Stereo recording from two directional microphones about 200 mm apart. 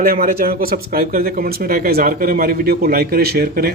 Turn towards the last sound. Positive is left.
turn(degrees=-50)  # may be behind; listen again after turning